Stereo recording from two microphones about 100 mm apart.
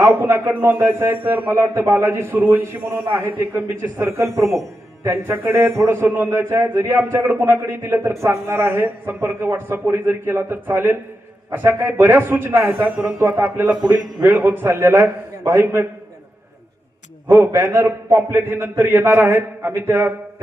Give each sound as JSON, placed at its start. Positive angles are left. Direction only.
{"t": 0.0, "sound": "a man's voice", "side_deg": -25}
{"t": 17.3, "sound": "a man's voice", "side_deg": -25}